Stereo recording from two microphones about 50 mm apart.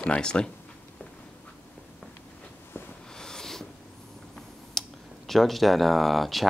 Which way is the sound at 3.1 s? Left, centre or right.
Centre.